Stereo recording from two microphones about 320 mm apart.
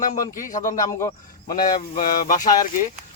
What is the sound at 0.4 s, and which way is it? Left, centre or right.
Speech, left.